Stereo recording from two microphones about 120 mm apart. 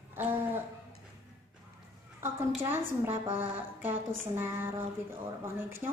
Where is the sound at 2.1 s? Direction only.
20° right (ahead or behind).